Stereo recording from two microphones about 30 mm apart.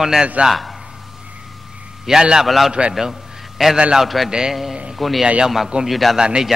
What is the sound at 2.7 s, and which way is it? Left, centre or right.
Speech, right.